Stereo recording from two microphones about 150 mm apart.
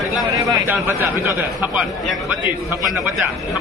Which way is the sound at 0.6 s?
15° right (ahead or behind).